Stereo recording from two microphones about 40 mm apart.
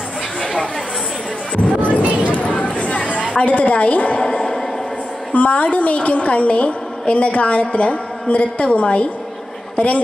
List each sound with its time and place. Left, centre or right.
0.4 s chatter: centre
1.6 s music: left
2.3 s chatter: left
3.1 s a woman's voice: left
4.2 s a sound: centre
5.3 s a woman's voice: left